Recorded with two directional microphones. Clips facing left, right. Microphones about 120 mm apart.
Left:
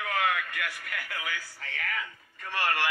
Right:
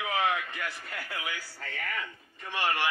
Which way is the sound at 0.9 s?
25° right (ahead or behind).